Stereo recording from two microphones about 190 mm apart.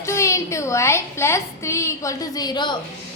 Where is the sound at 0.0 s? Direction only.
15° left (ahead or behind).